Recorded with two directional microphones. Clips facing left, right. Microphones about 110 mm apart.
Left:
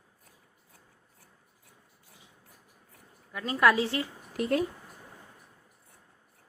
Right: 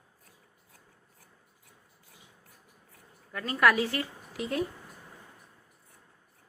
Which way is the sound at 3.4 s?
25° left (ahead or behind).